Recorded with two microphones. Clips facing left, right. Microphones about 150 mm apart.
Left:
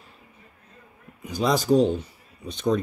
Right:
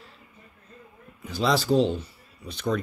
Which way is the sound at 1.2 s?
15° left (ahead or behind).